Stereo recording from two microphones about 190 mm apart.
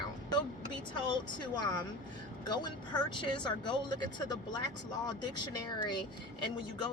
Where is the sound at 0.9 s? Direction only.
25° left (ahead or behind).